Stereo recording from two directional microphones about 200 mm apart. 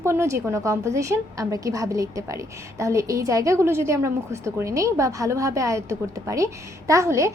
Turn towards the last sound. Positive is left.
turn(degrees=-15)  # may be behind; listen again after turning